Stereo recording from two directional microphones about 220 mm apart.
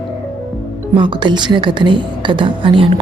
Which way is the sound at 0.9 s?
20° right (ahead or behind).